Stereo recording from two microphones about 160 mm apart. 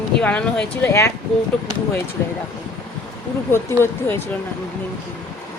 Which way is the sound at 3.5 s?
15° left (ahead or behind).